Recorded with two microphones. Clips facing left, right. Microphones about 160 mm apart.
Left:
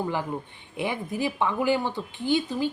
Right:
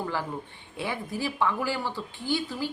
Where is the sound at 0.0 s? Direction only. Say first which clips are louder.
Left 3 dB; 20° left (ahead or behind).